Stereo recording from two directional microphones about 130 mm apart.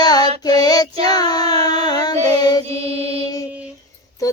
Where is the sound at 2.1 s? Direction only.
55° right (ahead or behind).